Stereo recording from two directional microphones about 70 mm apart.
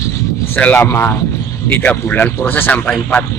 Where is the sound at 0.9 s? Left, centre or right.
Left.